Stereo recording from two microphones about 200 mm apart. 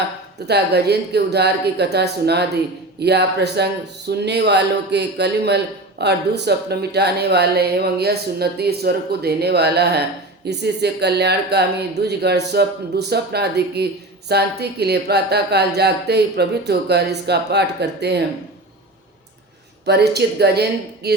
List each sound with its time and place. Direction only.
0.4 s speech: 55° right (ahead or behind)
19.8 s speech: 55° right (ahead or behind)